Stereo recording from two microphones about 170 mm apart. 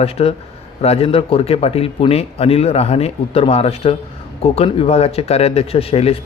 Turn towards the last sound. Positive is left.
turn(degrees=35)  # may be behind; listen again after turning